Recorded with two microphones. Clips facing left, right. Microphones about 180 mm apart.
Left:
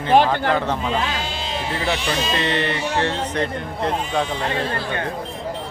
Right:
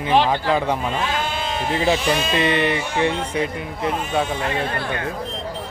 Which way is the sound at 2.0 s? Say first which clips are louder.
Right 2 dB; 55° right (ahead or behind).